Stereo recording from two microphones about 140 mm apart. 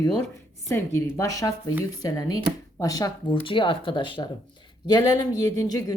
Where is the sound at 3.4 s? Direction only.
40° left (ahead or behind).